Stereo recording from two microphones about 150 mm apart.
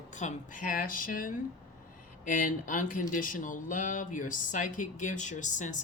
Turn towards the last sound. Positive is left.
turn(degrees=55)  # may be behind; listen again after turning